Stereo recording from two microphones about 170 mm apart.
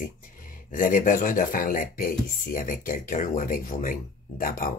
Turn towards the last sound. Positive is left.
turn(degrees=55)  # may be behind; listen again after turning